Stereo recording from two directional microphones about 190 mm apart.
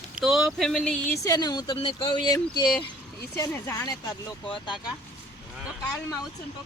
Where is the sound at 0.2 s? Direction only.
Centre (ahead or behind); by 3.9 s 15° left (ahead or behind).